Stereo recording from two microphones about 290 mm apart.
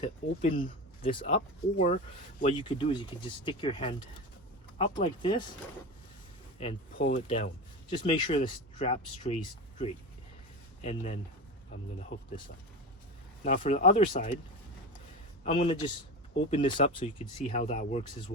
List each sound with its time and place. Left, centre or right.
0.0 s speech: left
6.6 s speech: left
13.4 s speech: left
15.4 s speech: centre